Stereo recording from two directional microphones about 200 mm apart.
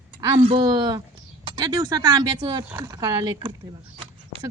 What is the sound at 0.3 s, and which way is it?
Speech, 30° right (ahead or behind).